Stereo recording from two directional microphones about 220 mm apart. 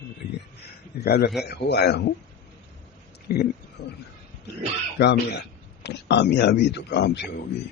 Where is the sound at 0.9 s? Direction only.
45° left (ahead or behind).